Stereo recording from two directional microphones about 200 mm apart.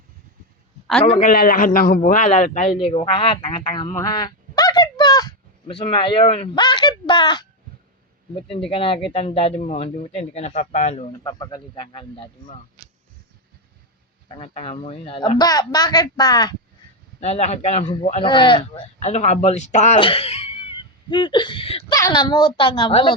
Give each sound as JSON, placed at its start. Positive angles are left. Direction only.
{"t": 1.0, "sound": "a man's voice", "side_deg": 30}
{"t": 1.3, "sound": "a man's voice", "side_deg": 45}
{"t": 2.7, "sound": "speech", "side_deg": 25}
{"t": 8.4, "sound": "a man's voice", "side_deg": 25}
{"t": 11.2, "sound": "speech", "side_deg": 20}
{"t": 14.3, "sound": "speech", "side_deg": 25}
{"t": 17.2, "sound": "speech", "side_deg": 30}
{"t": 21.9, "sound": "speech", "side_deg": 15}